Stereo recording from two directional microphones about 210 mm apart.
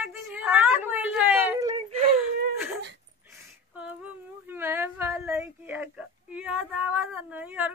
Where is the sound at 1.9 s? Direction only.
30° right (ahead or behind).